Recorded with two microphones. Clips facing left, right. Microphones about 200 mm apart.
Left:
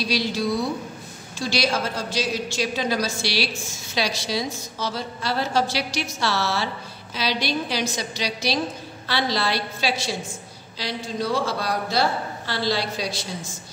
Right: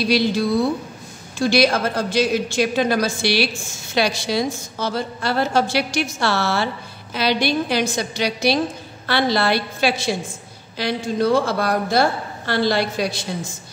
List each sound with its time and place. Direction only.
0.0 s a woman's voice: 55° right (ahead or behind)